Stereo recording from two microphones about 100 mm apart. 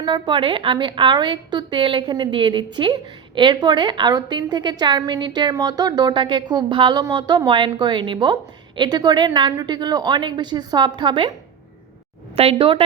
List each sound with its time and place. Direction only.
0.0 s a woman's voice: 50° right (ahead or behind)
12.4 s a woman's voice: 70° right (ahead or behind)